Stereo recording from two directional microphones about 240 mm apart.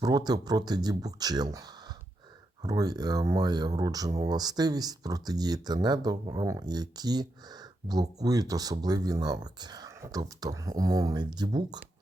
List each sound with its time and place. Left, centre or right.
0.0 s speech: centre